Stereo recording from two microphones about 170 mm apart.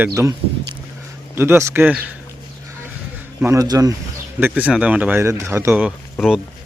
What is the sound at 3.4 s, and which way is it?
Speech, 20° right (ahead or behind).